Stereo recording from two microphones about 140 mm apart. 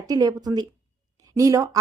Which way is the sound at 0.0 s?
25° right (ahead or behind).